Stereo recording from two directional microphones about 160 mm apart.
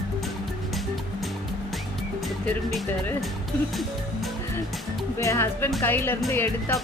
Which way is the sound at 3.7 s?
Centre (ahead or behind).